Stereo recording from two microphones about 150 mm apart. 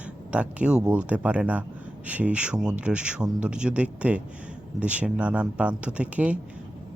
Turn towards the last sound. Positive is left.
turn(degrees=-10)  # may be behind; listen again after turning